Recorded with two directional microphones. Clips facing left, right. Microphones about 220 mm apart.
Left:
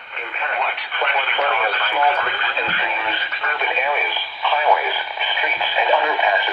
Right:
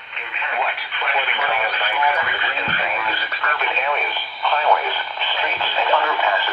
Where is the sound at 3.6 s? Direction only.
15° left (ahead or behind).